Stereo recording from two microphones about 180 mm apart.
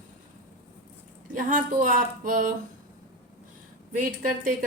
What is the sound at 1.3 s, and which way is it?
Speech, 45° right (ahead or behind).